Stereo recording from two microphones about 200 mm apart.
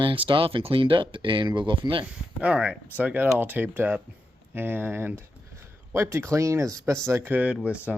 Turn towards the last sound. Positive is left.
turn(degrees=-5)  # may be behind; listen again after turning